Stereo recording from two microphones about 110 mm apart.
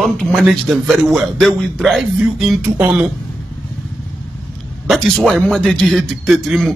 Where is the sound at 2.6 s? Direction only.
15° right (ahead or behind).